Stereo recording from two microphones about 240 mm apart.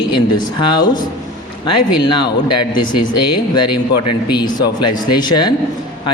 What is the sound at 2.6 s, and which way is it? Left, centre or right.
Speech, left.